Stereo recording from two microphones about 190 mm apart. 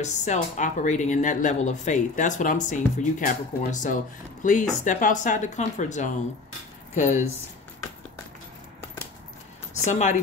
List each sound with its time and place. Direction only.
0.0 s speech: 40° left (ahead or behind)
9.8 s speech: 40° left (ahead or behind)